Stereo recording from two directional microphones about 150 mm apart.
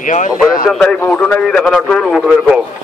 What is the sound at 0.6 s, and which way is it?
A man's voice, centre (ahead or behind).